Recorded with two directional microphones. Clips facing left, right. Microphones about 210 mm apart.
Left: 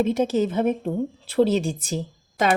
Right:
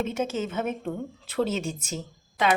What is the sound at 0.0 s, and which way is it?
Speech, 35° left (ahead or behind).